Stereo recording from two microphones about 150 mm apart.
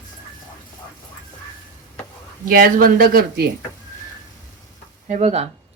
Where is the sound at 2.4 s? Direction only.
80° right.